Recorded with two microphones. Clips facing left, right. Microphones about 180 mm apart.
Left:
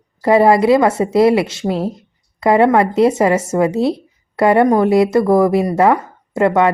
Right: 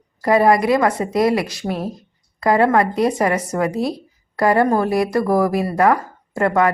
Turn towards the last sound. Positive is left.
turn(degrees=25)  # may be behind; listen again after turning